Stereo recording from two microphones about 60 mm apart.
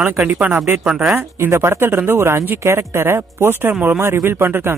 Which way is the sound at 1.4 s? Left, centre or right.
Right.